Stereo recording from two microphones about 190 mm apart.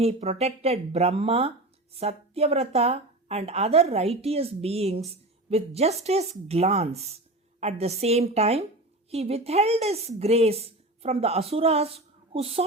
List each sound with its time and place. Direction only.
0.0 s speech: 30° right (ahead or behind)